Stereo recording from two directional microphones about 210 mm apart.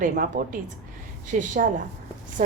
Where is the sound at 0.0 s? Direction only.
40° right (ahead or behind).